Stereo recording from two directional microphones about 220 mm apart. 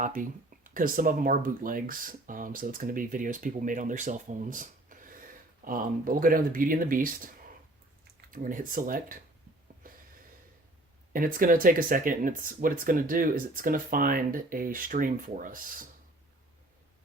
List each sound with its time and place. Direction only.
0.0 s speech: 40° right (ahead or behind)
9.8 s snort: 40° right (ahead or behind)
11.1 s speech: 40° right (ahead or behind)